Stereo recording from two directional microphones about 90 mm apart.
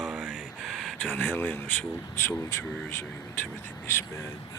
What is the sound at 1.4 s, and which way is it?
Speech, 20° left (ahead or behind).